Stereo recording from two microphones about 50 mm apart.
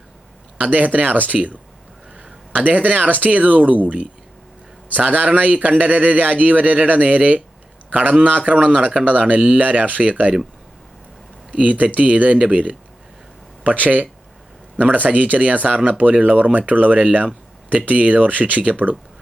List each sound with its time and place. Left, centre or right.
0.6 s a man's voice: right
11.5 s a man's voice: right